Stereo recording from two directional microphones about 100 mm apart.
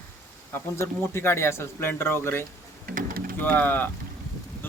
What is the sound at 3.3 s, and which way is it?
Speech, 15° left (ahead or behind).